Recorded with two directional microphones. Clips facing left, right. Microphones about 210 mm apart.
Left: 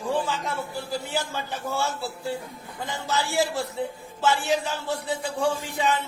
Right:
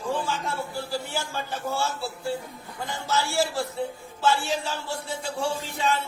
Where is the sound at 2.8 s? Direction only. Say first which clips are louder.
Even; 15° left (ahead or behind).